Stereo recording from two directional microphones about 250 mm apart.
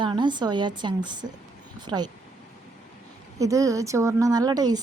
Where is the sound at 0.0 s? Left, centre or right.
Centre.